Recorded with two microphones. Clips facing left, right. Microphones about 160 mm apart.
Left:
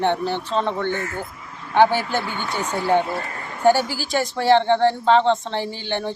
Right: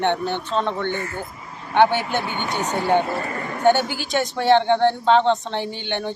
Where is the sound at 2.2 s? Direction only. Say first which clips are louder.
Right 1 dB; 25° right (ahead or behind).